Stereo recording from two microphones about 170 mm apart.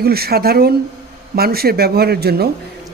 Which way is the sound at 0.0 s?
65° right (ahead or behind).